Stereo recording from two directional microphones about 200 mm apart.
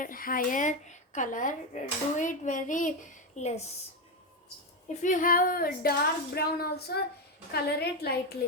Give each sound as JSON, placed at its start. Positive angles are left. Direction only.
{"t": 0.0, "sound": "a woman's voice", "side_deg": 45}
{"t": 5.0, "sound": "speech", "side_deg": 40}